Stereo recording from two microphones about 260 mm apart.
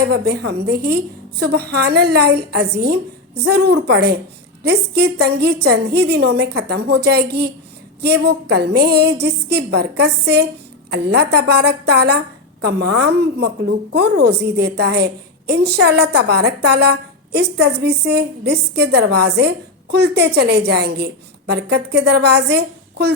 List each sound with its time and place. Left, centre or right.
0.1 s a woman's voice: right